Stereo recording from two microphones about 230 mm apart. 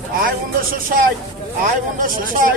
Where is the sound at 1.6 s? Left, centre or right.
Right.